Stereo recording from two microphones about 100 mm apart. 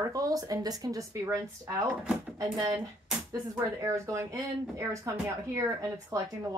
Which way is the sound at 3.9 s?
30° right (ahead or behind).